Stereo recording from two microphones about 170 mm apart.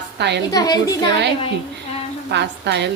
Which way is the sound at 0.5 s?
20° left (ahead or behind).